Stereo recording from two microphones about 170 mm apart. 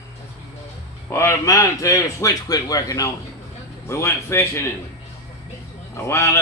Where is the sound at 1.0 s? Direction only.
15° left (ahead or behind).